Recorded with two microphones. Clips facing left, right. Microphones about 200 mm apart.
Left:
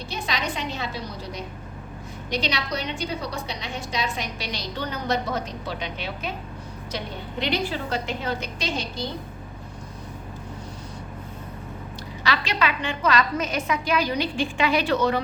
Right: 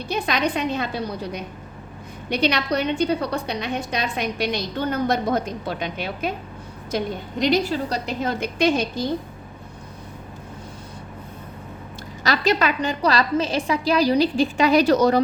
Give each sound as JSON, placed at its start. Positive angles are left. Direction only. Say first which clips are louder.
{"t": 0.1, "sound": "a woman's voice", "louder": "right 7 dB", "side_deg": -60}
{"t": 12.2, "sound": "a woman's voice", "louder": "right 5 dB", "side_deg": -40}